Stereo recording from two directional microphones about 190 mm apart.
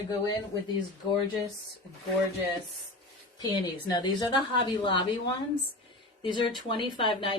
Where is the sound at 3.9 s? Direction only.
20° left (ahead or behind).